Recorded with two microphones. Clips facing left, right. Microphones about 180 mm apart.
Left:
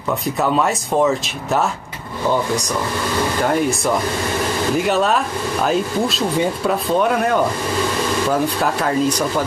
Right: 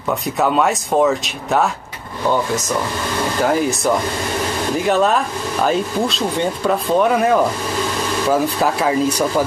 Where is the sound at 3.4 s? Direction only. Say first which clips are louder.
Right 3 dB; centre (ahead or behind).